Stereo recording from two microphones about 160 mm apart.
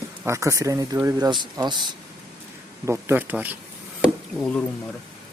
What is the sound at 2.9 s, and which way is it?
Speech, 15° right (ahead or behind).